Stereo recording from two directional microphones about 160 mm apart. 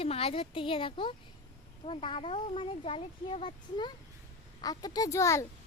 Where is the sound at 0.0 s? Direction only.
35° left (ahead or behind); by 5.5 s 20° left (ahead or behind).